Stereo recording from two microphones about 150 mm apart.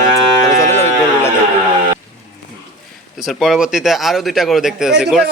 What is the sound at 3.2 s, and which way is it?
A man's voice, 5° right (ahead or behind).